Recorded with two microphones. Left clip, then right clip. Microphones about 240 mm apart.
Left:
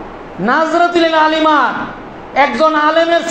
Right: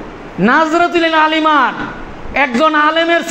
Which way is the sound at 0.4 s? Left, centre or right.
Right.